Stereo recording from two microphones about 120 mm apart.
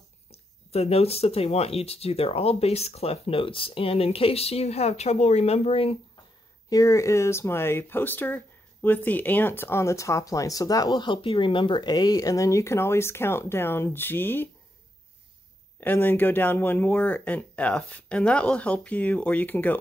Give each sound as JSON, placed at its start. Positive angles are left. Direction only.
{"t": 0.7, "sound": "speech", "side_deg": 60}
{"t": 6.7, "sound": "speech", "side_deg": 25}
{"t": 15.8, "sound": "speech", "side_deg": 15}